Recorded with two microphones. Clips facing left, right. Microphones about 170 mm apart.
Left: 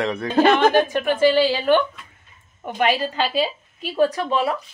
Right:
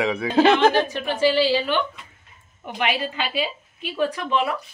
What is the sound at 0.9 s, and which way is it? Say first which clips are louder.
A woman's voice: left 4 dB; 50° left (ahead or behind).